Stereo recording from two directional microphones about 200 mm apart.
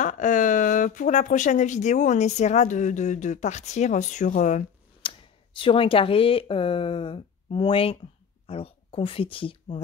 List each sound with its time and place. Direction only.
0.0 s speech: 40° left (ahead or behind)